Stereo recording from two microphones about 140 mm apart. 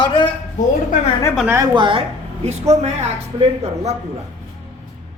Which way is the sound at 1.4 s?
20° right (ahead or behind).